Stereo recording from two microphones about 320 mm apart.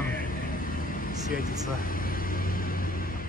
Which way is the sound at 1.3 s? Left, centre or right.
Left.